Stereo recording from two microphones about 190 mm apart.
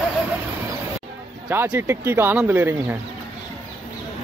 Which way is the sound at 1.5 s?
10° right (ahead or behind).